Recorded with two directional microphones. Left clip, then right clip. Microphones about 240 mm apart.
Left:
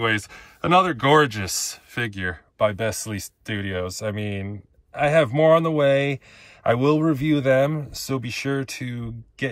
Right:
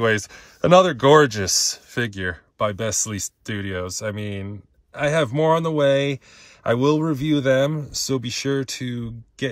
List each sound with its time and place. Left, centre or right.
0.0 s speech: right